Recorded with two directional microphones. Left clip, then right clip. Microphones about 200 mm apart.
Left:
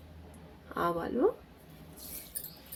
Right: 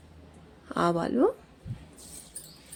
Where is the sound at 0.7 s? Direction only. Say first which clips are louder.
Right 5 dB; 50° right (ahead or behind).